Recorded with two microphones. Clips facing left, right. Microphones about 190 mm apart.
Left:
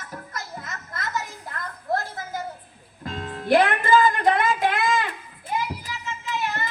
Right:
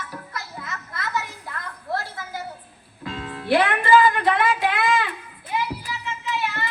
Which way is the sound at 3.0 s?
45° left (ahead or behind).